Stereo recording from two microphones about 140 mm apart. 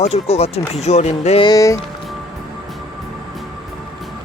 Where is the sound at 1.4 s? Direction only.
30° left (ahead or behind).